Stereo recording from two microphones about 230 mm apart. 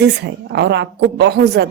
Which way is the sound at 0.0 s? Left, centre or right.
Right.